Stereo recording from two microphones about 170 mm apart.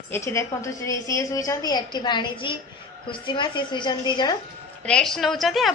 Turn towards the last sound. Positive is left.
turn(degrees=0)  # may be behind; listen again after turning